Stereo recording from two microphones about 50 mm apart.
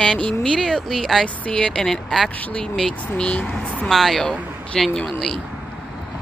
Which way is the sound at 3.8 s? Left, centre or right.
Centre.